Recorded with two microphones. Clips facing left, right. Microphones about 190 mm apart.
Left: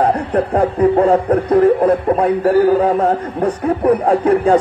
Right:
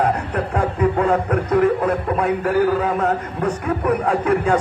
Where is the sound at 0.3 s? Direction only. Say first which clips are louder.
Left 6 dB; 35° left (ahead or behind).